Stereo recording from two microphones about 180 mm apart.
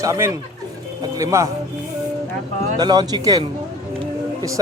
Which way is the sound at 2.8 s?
20° right (ahead or behind).